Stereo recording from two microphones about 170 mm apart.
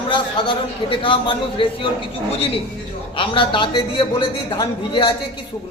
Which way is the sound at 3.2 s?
30° left (ahead or behind).